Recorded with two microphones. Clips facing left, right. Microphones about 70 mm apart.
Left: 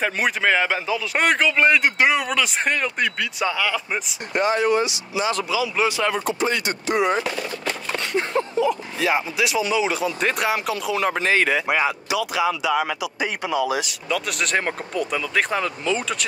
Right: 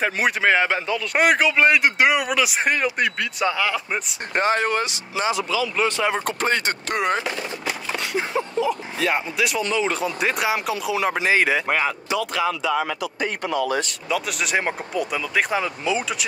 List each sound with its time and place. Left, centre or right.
0.0 s speech: centre
4.3 s speech: right
5.5 s speech: centre
6.2 s speech: right
7.2 s speech: centre
14.0 s speech: centre